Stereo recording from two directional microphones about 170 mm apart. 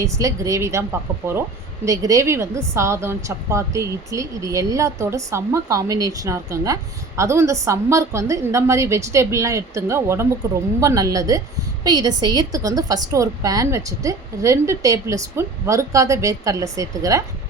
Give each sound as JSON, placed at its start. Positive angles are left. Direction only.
{"t": 0.0, "sound": "a woman's voice", "side_deg": -20}